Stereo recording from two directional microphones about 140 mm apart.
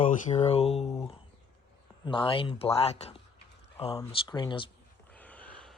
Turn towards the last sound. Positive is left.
turn(degrees=10)  # may be behind; listen again after turning